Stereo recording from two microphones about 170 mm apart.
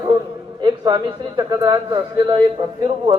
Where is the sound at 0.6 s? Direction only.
25° right (ahead or behind).